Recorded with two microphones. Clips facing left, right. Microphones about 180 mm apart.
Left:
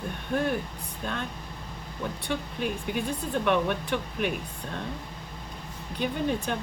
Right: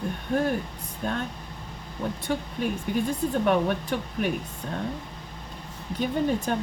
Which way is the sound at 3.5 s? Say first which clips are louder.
Even; 40° right (ahead or behind).